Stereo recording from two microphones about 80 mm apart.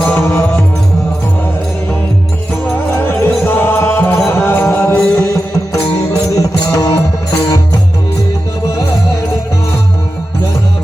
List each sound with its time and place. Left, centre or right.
0.0 s music: left
2.9 s music: left